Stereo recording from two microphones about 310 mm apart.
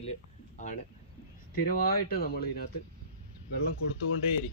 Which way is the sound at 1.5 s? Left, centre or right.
Left.